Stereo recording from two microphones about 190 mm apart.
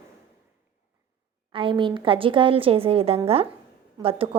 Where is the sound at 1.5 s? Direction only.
25° right (ahead or behind).